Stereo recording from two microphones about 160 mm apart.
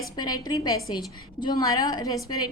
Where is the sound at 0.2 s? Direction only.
25° left (ahead or behind).